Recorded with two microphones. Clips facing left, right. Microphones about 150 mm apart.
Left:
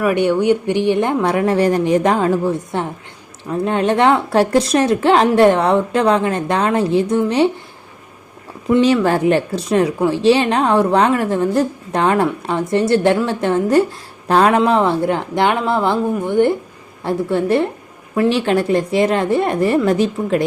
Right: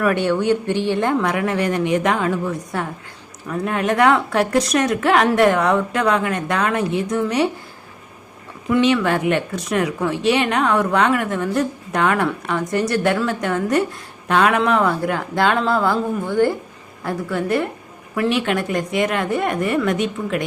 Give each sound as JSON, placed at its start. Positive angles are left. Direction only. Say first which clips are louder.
{"t": 0.1, "sound": "a woman's voice", "louder": "left 3 dB", "side_deg": 15}
{"t": 1.2, "sound": "a woman's voice", "louder": "left 5 dB", "side_deg": 30}
{"t": 8.8, "sound": "a woman's voice", "louder": "left 3 dB", "side_deg": 35}